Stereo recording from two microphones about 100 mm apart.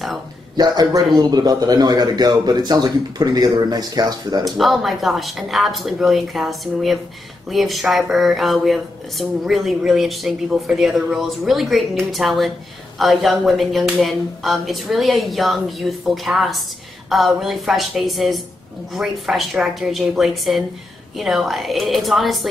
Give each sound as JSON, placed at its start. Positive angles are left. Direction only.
{"t": 0.6, "sound": "a man's voice", "side_deg": -40}
{"t": 4.5, "sound": "speech", "side_deg": 0}